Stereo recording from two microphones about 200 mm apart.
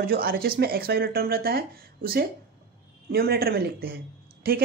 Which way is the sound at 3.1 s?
50° right (ahead or behind).